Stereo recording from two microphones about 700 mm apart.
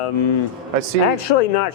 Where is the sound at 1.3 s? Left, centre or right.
Left.